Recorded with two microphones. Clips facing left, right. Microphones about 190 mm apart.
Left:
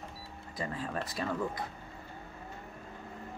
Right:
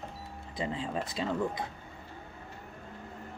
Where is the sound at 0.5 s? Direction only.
20° right (ahead or behind).